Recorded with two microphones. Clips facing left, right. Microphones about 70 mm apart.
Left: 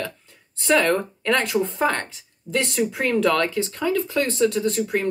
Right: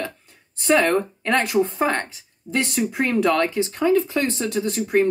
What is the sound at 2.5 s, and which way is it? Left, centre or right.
Speech, centre.